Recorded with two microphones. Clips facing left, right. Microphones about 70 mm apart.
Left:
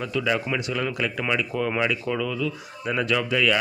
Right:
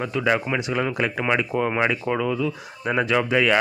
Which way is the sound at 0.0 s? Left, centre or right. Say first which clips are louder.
Right 3 dB; right.